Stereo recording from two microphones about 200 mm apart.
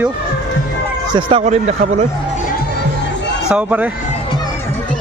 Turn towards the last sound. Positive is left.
turn(degrees=-5)  # may be behind; listen again after turning